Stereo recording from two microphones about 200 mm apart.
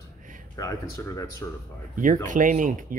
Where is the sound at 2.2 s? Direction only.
40° right (ahead or behind).